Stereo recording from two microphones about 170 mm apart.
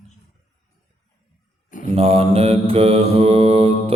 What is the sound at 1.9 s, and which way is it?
Mantra, 35° right (ahead or behind).